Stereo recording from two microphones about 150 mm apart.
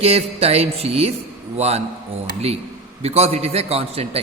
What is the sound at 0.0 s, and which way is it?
A man's voice, 40° right (ahead or behind).